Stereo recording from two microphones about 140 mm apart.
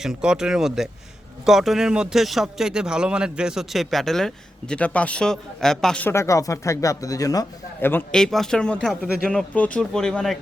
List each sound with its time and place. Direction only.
0.0 s speech: 5° right (ahead or behind)
6.1 s speech: 20° left (ahead or behind)
8.1 s speech: 5° left (ahead or behind)